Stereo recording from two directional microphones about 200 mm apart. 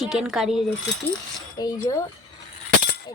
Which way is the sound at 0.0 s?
Centre (ahead or behind).